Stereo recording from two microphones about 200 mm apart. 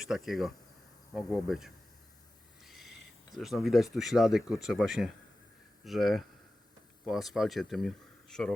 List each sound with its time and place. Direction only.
0.1 s speech: centre (ahead or behind)
2.6 s owl: centre (ahead or behind)
3.3 s speech: centre (ahead or behind)